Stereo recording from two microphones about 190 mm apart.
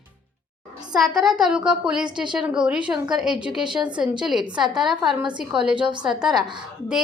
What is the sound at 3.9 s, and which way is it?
A woman's voice, 5° right (ahead or behind).